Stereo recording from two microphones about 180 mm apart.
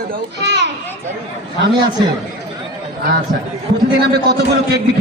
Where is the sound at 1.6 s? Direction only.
75° right (ahead or behind).